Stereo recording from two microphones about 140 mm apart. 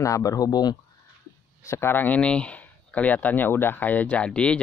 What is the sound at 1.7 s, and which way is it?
Speech, 15° left (ahead or behind).